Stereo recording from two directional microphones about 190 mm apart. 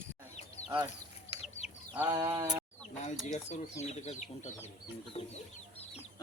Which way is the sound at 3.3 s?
35° left (ahead or behind).